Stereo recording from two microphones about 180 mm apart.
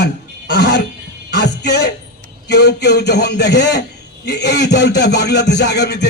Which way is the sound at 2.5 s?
70° left (ahead or behind).